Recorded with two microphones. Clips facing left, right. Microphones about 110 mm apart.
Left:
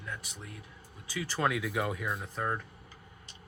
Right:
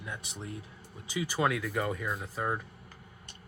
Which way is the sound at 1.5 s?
5° left (ahead or behind).